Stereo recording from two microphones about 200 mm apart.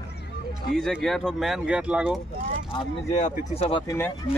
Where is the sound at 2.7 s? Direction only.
35° left (ahead or behind).